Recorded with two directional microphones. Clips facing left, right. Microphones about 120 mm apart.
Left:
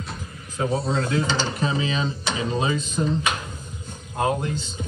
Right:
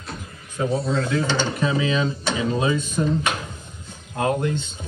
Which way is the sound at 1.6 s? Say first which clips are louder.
Right 3 dB; 30° left (ahead or behind).